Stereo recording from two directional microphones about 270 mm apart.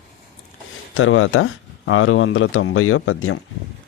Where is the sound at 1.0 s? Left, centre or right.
Left.